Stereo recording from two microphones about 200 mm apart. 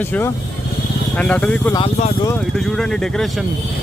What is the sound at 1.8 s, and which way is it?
Speech, 30° left (ahead or behind).